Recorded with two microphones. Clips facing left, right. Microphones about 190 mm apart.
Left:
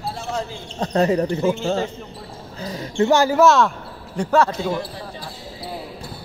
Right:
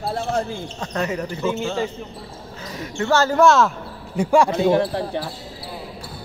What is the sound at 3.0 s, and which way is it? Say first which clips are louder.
Speech: left 3 dB; 15° left (ahead or behind).